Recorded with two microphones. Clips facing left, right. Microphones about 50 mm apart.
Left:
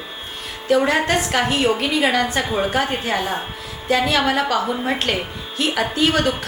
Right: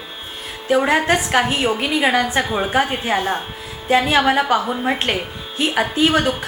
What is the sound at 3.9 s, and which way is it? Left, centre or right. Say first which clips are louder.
A woman's voice: right 3 dB; right.